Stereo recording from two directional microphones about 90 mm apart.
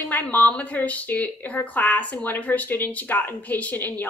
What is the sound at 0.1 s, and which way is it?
A woman's voice, 20° left (ahead or behind).